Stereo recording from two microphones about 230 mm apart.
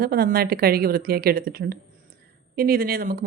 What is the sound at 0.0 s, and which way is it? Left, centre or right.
Speech, right.